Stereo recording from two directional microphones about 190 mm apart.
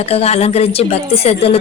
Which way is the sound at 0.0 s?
30° left (ahead or behind).